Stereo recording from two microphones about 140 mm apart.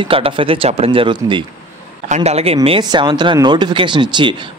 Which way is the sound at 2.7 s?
35° right (ahead or behind).